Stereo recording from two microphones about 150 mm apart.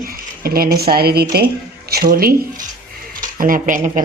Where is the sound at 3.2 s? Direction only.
65° right (ahead or behind).